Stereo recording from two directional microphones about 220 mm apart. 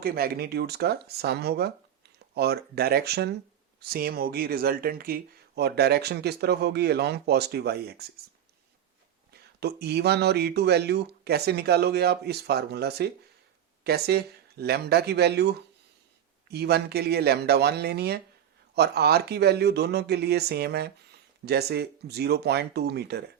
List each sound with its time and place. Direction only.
0.0 s speech: 45° right (ahead or behind)
9.3 s speech: 45° right (ahead or behind)